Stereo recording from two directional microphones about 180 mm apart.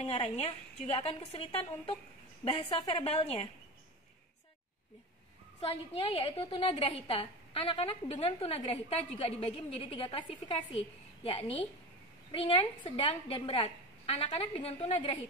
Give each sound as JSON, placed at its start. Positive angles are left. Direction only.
{"t": 0.0, "sound": "a woman's voice", "side_deg": 35}
{"t": 5.6, "sound": "a woman's voice", "side_deg": 35}
{"t": 11.2, "sound": "a woman's voice", "side_deg": 30}